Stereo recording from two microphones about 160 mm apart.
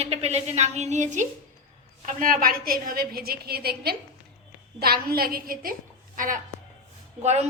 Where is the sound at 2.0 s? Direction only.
60° right (ahead or behind).